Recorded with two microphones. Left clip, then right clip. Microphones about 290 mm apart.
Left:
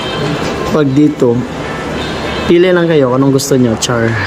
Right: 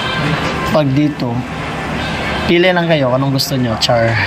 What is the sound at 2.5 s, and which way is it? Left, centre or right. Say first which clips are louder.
Speech: left 3 dB; centre.